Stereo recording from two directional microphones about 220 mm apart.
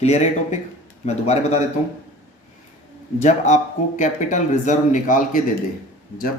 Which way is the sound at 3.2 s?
35° left (ahead or behind).